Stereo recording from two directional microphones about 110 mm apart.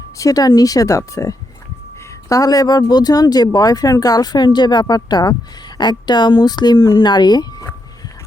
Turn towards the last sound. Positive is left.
turn(degrees=35)  # may be behind; listen again after turning